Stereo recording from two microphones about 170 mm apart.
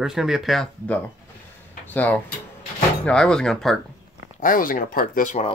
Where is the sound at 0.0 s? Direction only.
Centre (ahead or behind).